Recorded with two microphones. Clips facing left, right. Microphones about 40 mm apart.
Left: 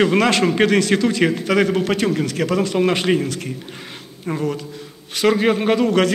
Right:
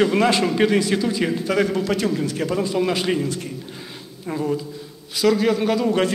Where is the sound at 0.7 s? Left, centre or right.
Left.